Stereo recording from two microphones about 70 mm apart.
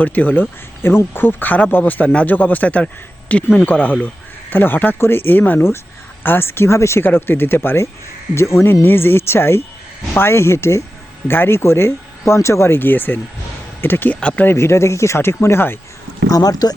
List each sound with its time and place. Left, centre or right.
0.0 s speech: left
7.0 s speech: left
14.2 s speech: centre
14.4 s speech: left
16.3 s speech: left